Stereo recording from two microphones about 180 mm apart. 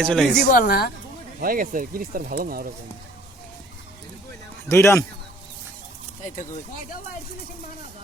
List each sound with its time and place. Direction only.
0.0 s speech: 5° left (ahead or behind)
0.3 s speech: 50° left (ahead or behind)
1.4 s speech: 50° right (ahead or behind)
4.7 s speech: 15° left (ahead or behind)
6.2 s speech: 45° left (ahead or behind)